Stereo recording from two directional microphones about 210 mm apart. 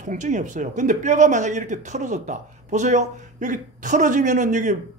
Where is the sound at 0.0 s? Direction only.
35° right (ahead or behind).